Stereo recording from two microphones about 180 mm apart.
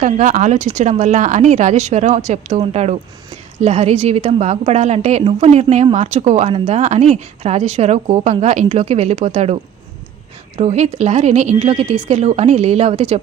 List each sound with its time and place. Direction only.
0.0 s a woman's voice: 45° right (ahead or behind)
10.6 s a woman's voice: 35° right (ahead or behind)